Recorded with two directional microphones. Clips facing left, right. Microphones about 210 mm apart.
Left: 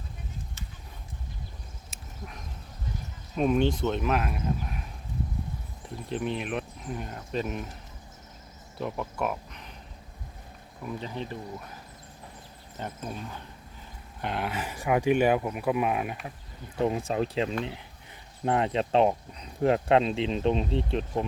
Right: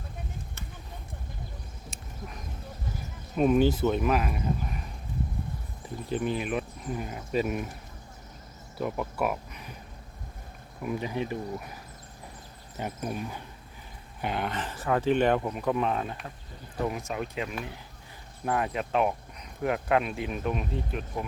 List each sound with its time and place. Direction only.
1.9 s dog: centre (ahead or behind)
3.3 s speech: 5° right (ahead or behind)
6.1 s speech: centre (ahead or behind)
8.8 s speech: 5° right (ahead or behind)
10.8 s speech: 10° right (ahead or behind)
12.7 s speech: 10° right (ahead or behind)
14.2 s speech: centre (ahead or behind)
16.8 s speech: 30° left (ahead or behind)